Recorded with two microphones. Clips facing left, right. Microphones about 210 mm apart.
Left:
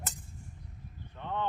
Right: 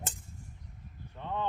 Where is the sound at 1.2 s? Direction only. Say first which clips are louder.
Even; 10° right (ahead or behind).